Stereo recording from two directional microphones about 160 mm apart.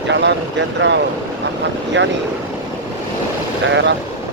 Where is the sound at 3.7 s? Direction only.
90° right.